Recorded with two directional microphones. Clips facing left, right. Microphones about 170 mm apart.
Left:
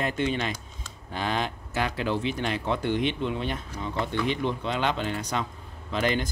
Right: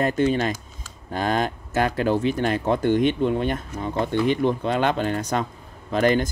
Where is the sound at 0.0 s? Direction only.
40° right (ahead or behind).